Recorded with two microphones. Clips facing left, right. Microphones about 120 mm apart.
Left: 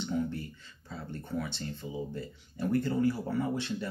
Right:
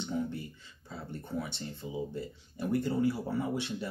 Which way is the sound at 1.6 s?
20° right (ahead or behind).